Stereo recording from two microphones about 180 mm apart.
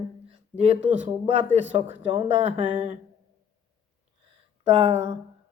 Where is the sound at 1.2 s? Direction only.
35° right (ahead or behind).